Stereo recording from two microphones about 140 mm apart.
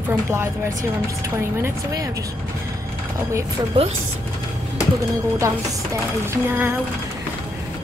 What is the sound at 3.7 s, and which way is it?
Speech, 40° right (ahead or behind).